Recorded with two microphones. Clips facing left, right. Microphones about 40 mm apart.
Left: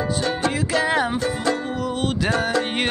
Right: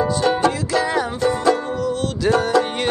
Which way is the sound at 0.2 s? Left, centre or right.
Centre.